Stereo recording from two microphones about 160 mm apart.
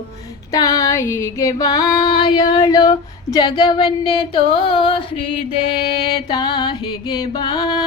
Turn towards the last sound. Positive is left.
turn(degrees=25)  # may be behind; listen again after turning